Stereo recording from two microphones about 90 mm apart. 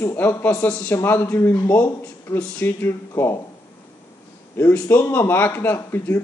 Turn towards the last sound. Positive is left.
turn(degrees=25)  # may be behind; listen again after turning